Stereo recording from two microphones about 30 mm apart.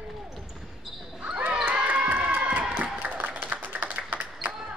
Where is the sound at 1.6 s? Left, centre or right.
Right.